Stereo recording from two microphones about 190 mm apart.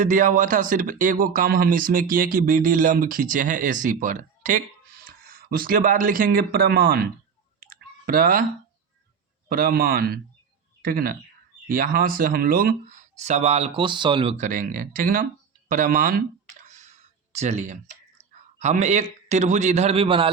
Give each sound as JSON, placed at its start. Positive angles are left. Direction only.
{"t": 0.0, "sound": "speech", "side_deg": -45}
{"t": 7.6, "sound": "clicking", "side_deg": -50}
{"t": 9.5, "sound": "speech", "side_deg": -50}
{"t": 13.1, "sound": "speech", "side_deg": -35}
{"t": 14.3, "sound": "speech", "side_deg": -45}
{"t": 15.7, "sound": "a sound", "side_deg": -45}
{"t": 17.3, "sound": "a man's voice", "side_deg": -35}